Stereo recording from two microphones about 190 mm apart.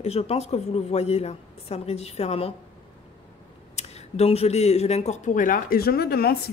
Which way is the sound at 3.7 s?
35° left (ahead or behind).